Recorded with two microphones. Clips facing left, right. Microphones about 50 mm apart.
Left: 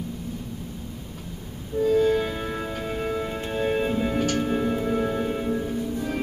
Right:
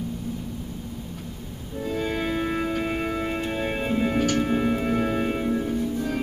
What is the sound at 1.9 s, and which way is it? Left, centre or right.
Music, centre.